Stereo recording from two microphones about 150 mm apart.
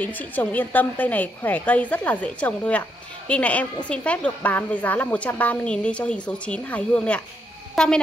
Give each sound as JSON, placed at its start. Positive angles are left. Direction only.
{"t": 0.0, "sound": "a woman's voice", "side_deg": 10}